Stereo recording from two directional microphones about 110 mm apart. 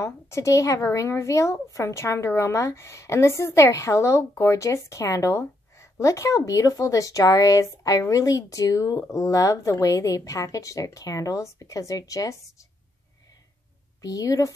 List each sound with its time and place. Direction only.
0.0 s a woman's voice: 25° left (ahead or behind)
14.0 s speech: 30° left (ahead or behind)